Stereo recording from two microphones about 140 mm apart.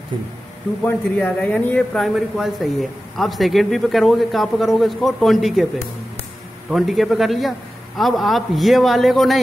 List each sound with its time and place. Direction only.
0.8 s speech: 10° left (ahead or behind)
2.1 s a man's voice: centre (ahead or behind)
6.7 s a man's voice: centre (ahead or behind)